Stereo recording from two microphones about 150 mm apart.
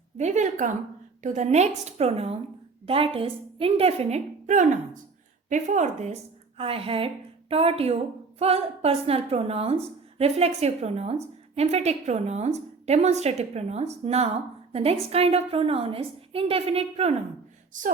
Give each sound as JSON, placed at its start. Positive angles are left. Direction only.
{"t": 0.2, "sound": "a woman's voice", "side_deg": -50}
{"t": 6.6, "sound": "a woman's voice", "side_deg": -40}
{"t": 17.7, "sound": "speech", "side_deg": -60}